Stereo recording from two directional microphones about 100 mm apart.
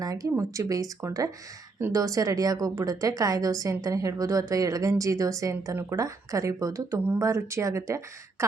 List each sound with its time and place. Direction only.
0.0 s a woman's voice: 35° right (ahead or behind)